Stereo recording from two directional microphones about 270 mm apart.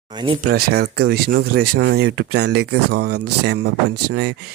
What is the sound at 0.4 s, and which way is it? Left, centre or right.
Speech, right.